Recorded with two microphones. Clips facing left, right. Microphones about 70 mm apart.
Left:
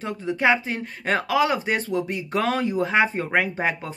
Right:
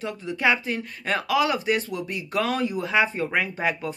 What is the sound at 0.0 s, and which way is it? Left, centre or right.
Speech, left.